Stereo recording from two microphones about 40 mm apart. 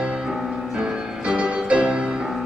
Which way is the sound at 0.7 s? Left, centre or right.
Centre.